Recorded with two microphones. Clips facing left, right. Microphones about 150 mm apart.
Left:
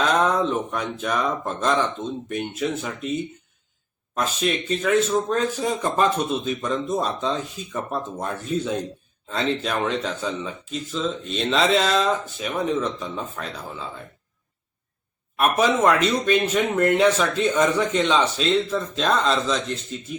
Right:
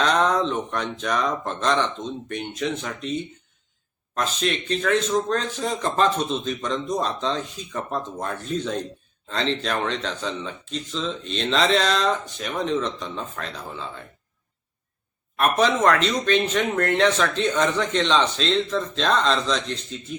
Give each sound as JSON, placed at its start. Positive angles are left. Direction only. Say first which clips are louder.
{"t": 0.0, "sound": "speech", "louder": "even", "side_deg": 5}
{"t": 15.5, "sound": "speech", "louder": "left 1 dB", "side_deg": 5}